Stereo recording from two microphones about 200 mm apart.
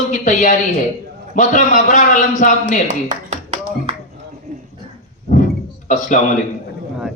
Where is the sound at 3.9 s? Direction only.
30° right (ahead or behind).